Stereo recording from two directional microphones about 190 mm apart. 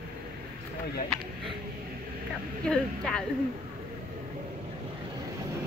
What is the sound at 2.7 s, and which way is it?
Speech, 5° left (ahead or behind).